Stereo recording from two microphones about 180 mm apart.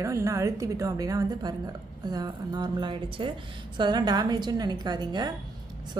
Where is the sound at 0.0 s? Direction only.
15° right (ahead or behind).